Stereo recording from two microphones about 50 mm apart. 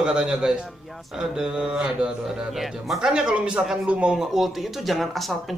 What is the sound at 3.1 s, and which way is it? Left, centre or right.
Speech, centre.